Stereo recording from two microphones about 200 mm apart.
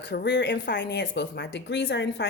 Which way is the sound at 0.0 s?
60° left (ahead or behind).